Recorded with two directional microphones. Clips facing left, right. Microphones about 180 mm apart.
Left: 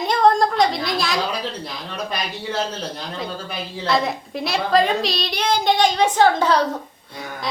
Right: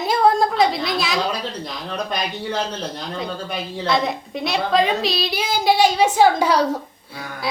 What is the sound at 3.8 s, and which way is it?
A woman's voice, centre (ahead or behind).